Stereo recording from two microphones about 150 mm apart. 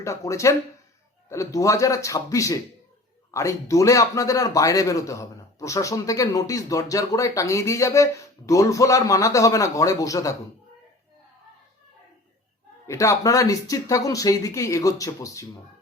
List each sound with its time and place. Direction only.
0.0 s speech: 20° left (ahead or behind)
12.9 s speech: 20° left (ahead or behind)